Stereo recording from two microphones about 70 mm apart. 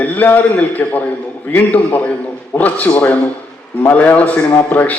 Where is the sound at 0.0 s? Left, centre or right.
Left.